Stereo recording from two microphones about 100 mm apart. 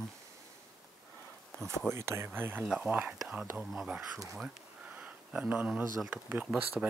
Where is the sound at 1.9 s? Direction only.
25° right (ahead or behind).